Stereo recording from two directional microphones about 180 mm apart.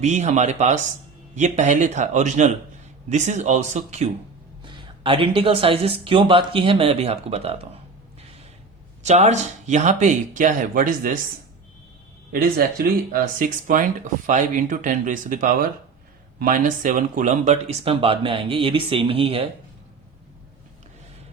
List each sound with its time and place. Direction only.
0.0 s speech: 40° right (ahead or behind)
4.6 s speech: 25° right (ahead or behind)
9.0 s speech: 40° right (ahead or behind)
12.3 s speech: 60° right (ahead or behind)
13.4 s speech: 45° right (ahead or behind); by 19.5 s 30° right (ahead or behind)